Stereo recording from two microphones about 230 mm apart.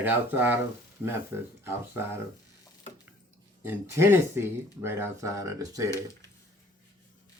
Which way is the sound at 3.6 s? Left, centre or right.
Centre.